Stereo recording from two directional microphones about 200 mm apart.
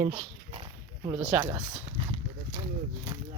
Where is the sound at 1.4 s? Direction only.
15° right (ahead or behind).